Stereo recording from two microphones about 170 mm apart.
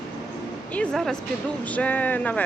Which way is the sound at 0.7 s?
5° left (ahead or behind).